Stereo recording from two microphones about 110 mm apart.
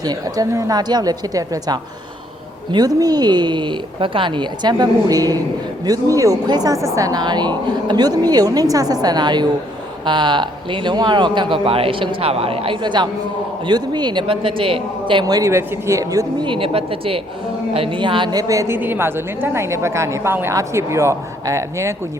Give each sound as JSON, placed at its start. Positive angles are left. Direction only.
{"t": 0.0, "sound": "a woman's voice", "side_deg": -35}
{"t": 16.4, "sound": "a woman's voice", "side_deg": -50}
{"t": 18.3, "sound": "a woman's voice", "side_deg": -30}